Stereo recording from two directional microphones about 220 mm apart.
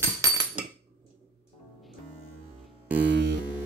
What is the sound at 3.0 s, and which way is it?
Hum, 55° right (ahead or behind).